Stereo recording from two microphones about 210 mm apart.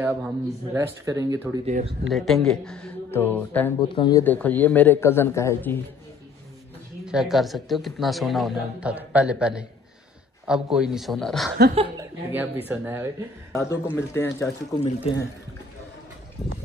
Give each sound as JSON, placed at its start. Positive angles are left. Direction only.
{"t": 0.0, "sound": "speech", "side_deg": -10}
{"t": 1.7, "sound": "speech", "side_deg": -35}
{"t": 2.0, "sound": "speech", "side_deg": 0}
{"t": 3.9, "sound": "speech", "side_deg": 20}
{"t": 4.2, "sound": "a man's voice", "side_deg": 10}
{"t": 7.1, "sound": "speech", "side_deg": 0}
{"t": 12.0, "sound": "speech", "side_deg": -10}
{"t": 13.5, "sound": "a man's voice", "side_deg": 15}
{"t": 15.1, "sound": "speech", "side_deg": 30}